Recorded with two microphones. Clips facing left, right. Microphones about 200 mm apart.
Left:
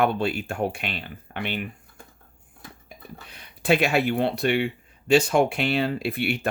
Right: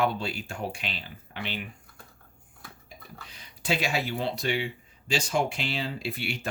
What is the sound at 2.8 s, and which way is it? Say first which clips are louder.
Speech: left 5 dB; 60° left (ahead or behind).